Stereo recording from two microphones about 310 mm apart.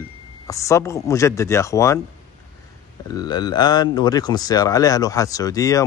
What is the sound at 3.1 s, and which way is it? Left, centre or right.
Speech, centre.